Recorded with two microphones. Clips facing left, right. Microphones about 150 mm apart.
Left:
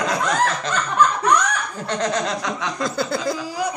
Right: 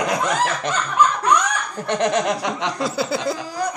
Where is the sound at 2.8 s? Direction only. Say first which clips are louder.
Even; 5° right (ahead or behind).